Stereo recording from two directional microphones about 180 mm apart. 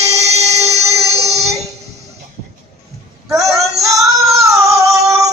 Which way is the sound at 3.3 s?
15° right (ahead or behind).